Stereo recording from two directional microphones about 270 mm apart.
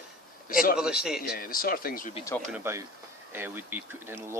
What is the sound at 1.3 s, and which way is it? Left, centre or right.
Speech, left.